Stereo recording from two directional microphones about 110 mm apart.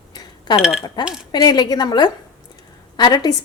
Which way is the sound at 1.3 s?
35° left (ahead or behind).